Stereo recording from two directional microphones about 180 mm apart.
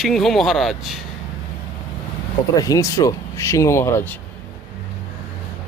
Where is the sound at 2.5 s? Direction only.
20° left (ahead or behind).